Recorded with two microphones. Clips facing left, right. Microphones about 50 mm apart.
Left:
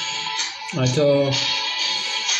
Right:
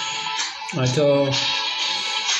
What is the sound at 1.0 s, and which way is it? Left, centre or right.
Speech, right.